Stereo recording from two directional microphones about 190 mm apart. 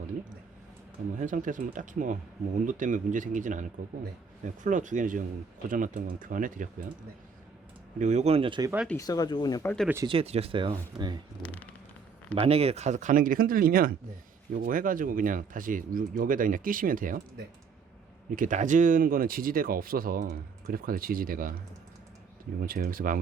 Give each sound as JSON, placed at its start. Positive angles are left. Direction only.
{"t": 1.2, "sound": "speech", "side_deg": -45}
{"t": 7.9, "sound": "speech", "side_deg": -40}
{"t": 9.0, "sound": "speech", "side_deg": 20}
{"t": 10.1, "sound": "speech", "side_deg": -30}
{"t": 11.4, "sound": "speech", "side_deg": 10}
{"t": 12.3, "sound": "speech", "side_deg": -30}
{"t": 22.6, "sound": "speech", "side_deg": -50}